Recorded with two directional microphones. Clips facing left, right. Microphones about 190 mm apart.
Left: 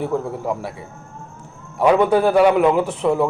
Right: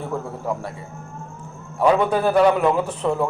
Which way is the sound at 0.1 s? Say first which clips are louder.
Left 4 dB; 10° left (ahead or behind).